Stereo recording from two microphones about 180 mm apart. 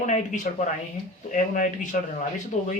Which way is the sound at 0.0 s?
40° left (ahead or behind).